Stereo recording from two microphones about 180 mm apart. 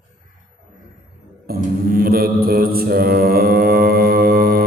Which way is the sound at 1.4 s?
55° right (ahead or behind).